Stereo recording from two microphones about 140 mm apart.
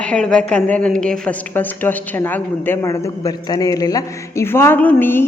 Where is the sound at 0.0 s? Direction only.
5° left (ahead or behind).